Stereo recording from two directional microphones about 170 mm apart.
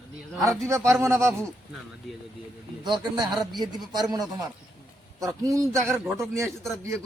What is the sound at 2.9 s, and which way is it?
A man's voice, 25° right (ahead or behind).